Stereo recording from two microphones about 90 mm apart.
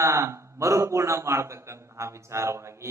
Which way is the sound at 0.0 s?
30° right (ahead or behind).